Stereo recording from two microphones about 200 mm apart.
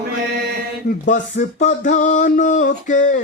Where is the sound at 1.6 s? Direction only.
40° left (ahead or behind).